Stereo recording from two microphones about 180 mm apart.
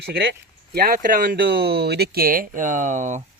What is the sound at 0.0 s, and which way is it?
Speech, 60° right (ahead or behind).